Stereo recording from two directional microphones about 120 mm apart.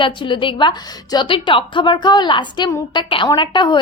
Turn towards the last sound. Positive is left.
turn(degrees=40)  # may be behind; listen again after turning